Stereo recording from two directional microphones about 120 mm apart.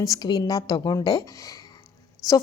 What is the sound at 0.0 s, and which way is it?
A woman's voice, 30° left (ahead or behind).